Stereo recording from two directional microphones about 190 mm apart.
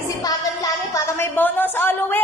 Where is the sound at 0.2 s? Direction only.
20° left (ahead or behind).